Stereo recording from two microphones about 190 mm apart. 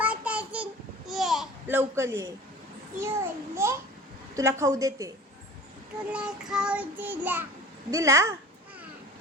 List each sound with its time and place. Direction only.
0.0 s babbling: 10° right (ahead or behind)
3.0 s child singing: 15° right (ahead or behind)
6.1 s child singing: 5° right (ahead or behind)